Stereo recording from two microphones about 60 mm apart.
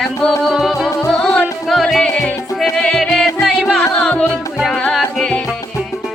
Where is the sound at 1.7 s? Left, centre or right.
Centre.